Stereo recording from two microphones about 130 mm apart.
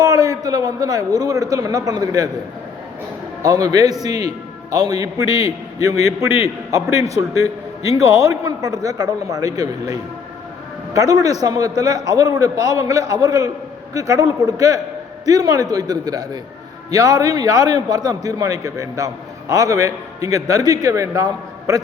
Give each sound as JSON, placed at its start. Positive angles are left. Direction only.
{"t": 0.0, "sound": "a man's voice", "side_deg": -30}
{"t": 3.4, "sound": "a man's voice", "side_deg": -25}